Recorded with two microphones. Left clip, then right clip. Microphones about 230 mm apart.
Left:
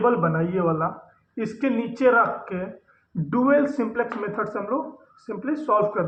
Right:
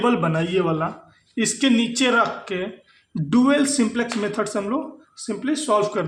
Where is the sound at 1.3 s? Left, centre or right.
Right.